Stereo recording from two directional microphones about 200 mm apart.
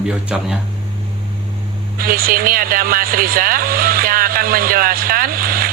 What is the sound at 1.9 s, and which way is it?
Speech, 45° right (ahead or behind).